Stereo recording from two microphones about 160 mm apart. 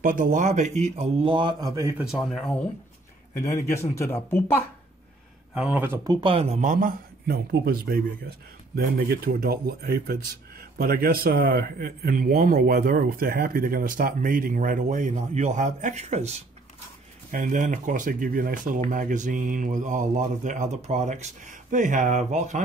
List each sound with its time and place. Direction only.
0.0 s speech: 60° right (ahead or behind); by 2.0 s 20° right (ahead or behind)
2.0 s speech: centre (ahead or behind)
3.4 s speech: 20° left (ahead or behind)
5.5 s speech: 10° right (ahead or behind)
6.0 s speech: 35° right (ahead or behind)
17.3 s speech: 55° right (ahead or behind)